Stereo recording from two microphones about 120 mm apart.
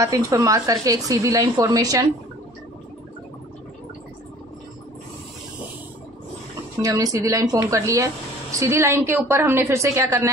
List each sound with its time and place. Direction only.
0.0 s speech: 25° right (ahead or behind)
6.8 s speech: 30° right (ahead or behind)